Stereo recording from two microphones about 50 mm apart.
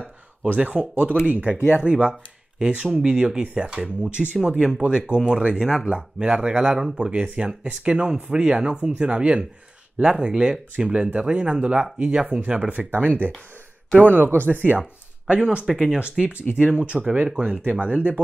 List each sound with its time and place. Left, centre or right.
0.7 s speech: right
14.0 s speech: right
14.8 s speech: right
15.6 s speech: centre
16.0 s speech: right